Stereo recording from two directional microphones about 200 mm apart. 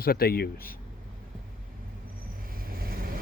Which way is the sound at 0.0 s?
50° left (ahead or behind).